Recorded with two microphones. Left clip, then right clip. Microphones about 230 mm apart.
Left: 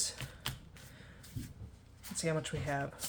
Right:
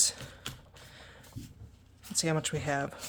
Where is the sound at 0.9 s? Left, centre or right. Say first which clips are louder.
Right 5 dB; right.